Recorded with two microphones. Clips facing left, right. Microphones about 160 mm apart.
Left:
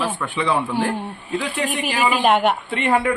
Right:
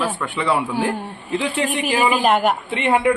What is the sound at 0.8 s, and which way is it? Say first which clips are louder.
Speech: right 1 dB; 20° right (ahead or behind).